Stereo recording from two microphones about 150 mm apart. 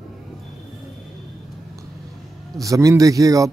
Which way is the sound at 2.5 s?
20° right (ahead or behind).